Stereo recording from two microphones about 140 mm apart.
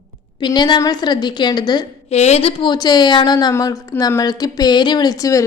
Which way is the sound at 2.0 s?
50° left (ahead or behind).